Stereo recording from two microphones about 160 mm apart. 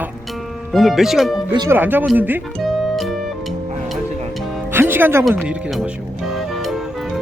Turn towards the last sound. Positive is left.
turn(degrees=0)  # may be behind; listen again after turning